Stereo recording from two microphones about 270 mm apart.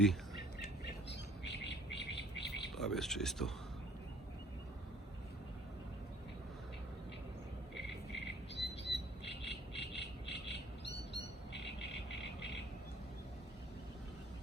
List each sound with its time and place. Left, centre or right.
0.6 s bird: left
2.7 s speech: centre
8.1 s squawk: left